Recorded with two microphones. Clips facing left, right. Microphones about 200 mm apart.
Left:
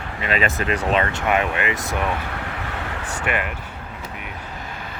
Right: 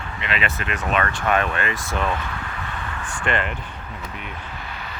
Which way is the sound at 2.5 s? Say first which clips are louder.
Left 3 dB; 75° left (ahead or behind).